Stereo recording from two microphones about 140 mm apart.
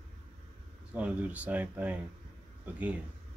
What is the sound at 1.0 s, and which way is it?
Speech, 10° right (ahead or behind).